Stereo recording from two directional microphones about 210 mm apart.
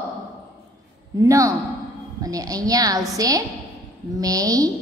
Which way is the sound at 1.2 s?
15° right (ahead or behind).